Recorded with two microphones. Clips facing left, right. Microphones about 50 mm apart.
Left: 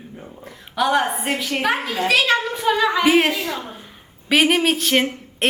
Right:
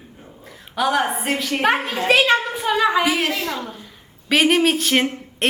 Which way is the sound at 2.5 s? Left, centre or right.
Centre.